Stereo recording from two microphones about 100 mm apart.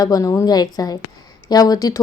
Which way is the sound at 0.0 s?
35° left (ahead or behind).